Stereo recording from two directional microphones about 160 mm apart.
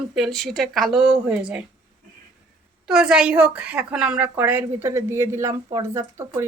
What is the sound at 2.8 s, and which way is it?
A woman's voice, 5° right (ahead or behind).